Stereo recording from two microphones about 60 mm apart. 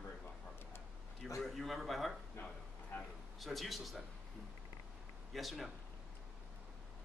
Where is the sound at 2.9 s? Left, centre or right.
Left.